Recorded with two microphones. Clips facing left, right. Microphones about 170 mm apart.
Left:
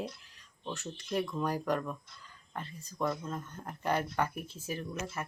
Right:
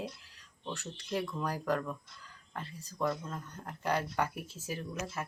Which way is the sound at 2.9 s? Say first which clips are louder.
Even; 5° left (ahead or behind).